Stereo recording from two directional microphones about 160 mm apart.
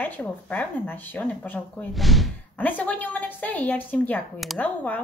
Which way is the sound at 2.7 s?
10° left (ahead or behind).